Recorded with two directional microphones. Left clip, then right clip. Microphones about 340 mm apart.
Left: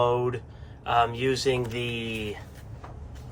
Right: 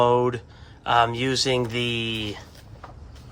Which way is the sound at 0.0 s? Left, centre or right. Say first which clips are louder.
Right 5 dB; right.